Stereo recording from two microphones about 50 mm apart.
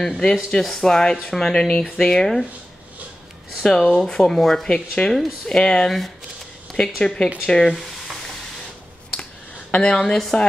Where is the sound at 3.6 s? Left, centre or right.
Centre.